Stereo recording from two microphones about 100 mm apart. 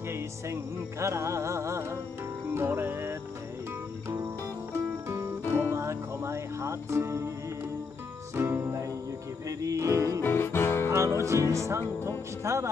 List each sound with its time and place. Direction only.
0.1 s music: 30° right (ahead or behind)
4.7 s music: 25° right (ahead or behind)
8.4 s music: 25° right (ahead or behind)
10.2 s music: 25° left (ahead or behind)
10.9 s music: 30° right (ahead or behind)